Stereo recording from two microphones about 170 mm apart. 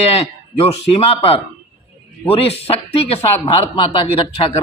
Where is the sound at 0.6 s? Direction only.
35° left (ahead or behind).